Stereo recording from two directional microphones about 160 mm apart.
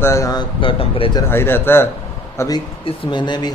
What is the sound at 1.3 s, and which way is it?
A man's voice, 15° left (ahead or behind).